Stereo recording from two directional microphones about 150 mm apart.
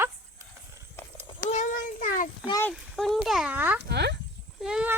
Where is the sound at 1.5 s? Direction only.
55° left (ahead or behind).